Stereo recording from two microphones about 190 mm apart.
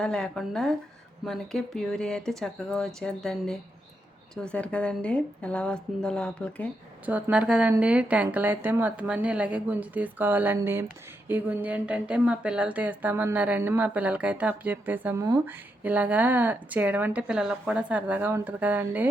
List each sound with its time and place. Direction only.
0.0 s speech: 5° left (ahead or behind)
7.0 s speech: 5° right (ahead or behind)